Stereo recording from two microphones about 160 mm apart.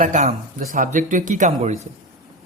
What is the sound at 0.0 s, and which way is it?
A man's voice, 50° right (ahead or behind).